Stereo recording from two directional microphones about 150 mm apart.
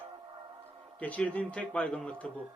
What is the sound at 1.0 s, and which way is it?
A man's voice, 10° left (ahead or behind).